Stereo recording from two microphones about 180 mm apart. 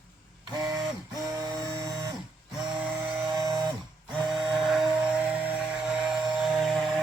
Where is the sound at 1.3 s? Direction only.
20° right (ahead or behind).